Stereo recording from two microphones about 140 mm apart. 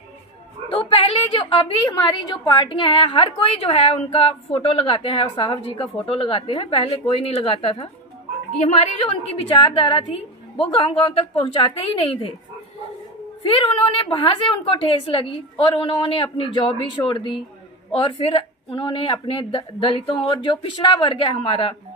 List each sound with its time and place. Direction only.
0.7 s a woman's voice: 40° left (ahead or behind)
13.4 s a woman's voice: 40° left (ahead or behind)